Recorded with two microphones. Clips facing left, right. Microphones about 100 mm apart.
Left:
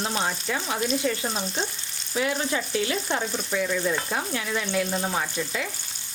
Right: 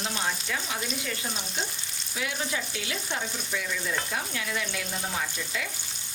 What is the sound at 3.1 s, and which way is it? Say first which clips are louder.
Stir: left 5 dB; 50° left (ahead or behind).